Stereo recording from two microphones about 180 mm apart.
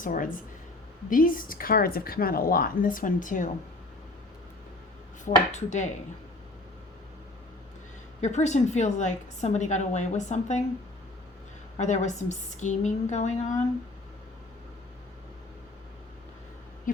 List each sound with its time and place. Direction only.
0.0 s a woman's voice: 50° left (ahead or behind)
5.2 s a woman's voice: 40° left (ahead or behind)
8.2 s a woman's voice: 40° left (ahead or behind)
11.8 s a woman's voice: 40° left (ahead or behind)